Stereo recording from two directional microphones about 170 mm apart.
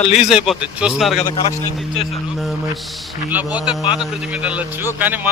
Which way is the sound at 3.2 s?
10° right (ahead or behind).